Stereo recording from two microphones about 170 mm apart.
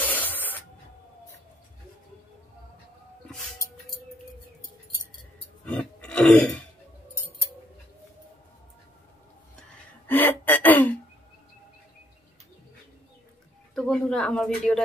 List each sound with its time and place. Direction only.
0.0 s spray: 10° left (ahead or behind)
5.7 s a sound: 5° left (ahead or behind)
9.6 s gasp: 10° left (ahead or behind)
13.7 s speech: 5° left (ahead or behind)